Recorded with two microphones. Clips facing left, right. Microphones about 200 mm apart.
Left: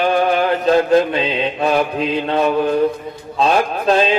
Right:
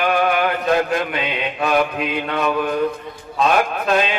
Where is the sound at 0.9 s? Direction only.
30° left (ahead or behind).